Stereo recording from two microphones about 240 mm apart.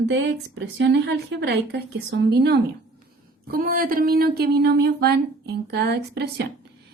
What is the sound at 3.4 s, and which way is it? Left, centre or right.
A woman's voice, right.